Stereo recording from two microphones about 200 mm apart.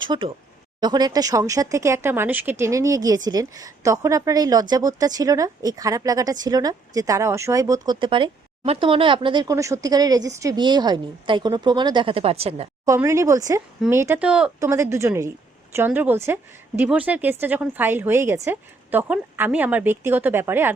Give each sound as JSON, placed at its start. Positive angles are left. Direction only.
{"t": 0.0, "sound": "speech", "side_deg": -25}
{"t": 12.8, "sound": "speech", "side_deg": -15}